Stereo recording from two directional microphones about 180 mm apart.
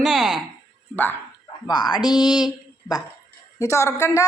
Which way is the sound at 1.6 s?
25° left (ahead or behind).